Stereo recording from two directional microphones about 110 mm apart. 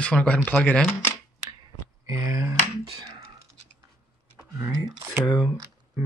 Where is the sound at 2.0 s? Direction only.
30° right (ahead or behind).